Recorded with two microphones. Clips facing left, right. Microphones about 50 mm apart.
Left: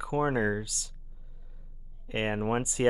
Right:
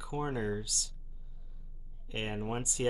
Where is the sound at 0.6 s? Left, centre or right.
Left.